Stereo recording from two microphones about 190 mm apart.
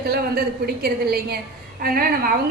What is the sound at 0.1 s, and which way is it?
A woman's voice, 55° right (ahead or behind).